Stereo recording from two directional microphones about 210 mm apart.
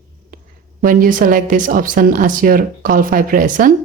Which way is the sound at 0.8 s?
40° right (ahead or behind).